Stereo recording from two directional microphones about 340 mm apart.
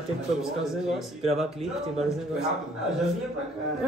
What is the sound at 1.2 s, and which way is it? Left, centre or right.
Speech, centre.